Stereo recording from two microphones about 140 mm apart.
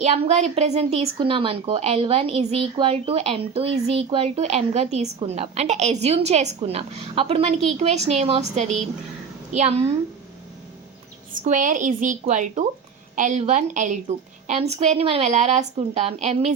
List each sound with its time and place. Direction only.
0.0 s speech: 50° right (ahead or behind)
11.3 s a woman's voice: 65° right (ahead or behind); by 16.5 s 50° right (ahead or behind)